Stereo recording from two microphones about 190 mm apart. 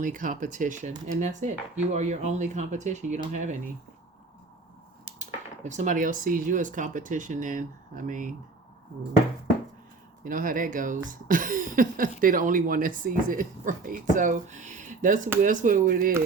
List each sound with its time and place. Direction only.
0.0 s speech: 45° right (ahead or behind)
5.2 s speech: 40° right (ahead or behind)
10.2 s speech: 45° right (ahead or behind)